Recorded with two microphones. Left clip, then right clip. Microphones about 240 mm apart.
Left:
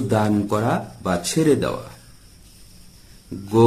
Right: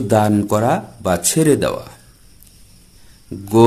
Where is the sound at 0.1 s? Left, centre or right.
Right.